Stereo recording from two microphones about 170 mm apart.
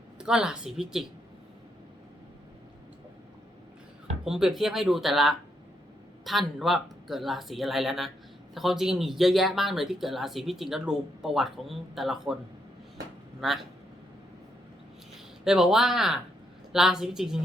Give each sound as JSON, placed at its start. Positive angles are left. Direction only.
{"t": 0.2, "sound": "speech", "side_deg": -5}
{"t": 4.3, "sound": "speech", "side_deg": -5}
{"t": 13.4, "sound": "speech", "side_deg": 0}
{"t": 15.1, "sound": "speech", "side_deg": 0}